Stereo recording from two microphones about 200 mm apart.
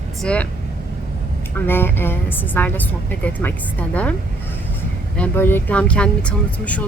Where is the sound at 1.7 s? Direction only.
10° left (ahead or behind).